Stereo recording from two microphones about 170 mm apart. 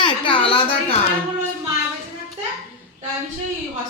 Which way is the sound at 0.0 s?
30° left (ahead or behind).